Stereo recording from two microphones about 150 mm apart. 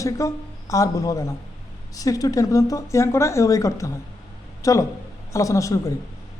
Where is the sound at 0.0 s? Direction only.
20° left (ahead or behind).